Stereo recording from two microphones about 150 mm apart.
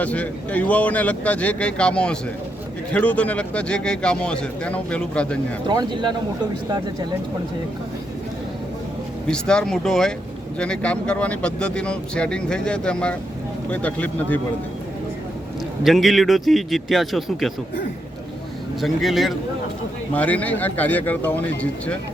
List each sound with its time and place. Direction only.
0.0 s speech: 10° left (ahead or behind)
5.6 s speech: 30° right (ahead or behind)
9.2 s a man's voice: 5° left (ahead or behind)
15.8 s a man's voice: centre (ahead or behind)
18.8 s a man's voice: centre (ahead or behind)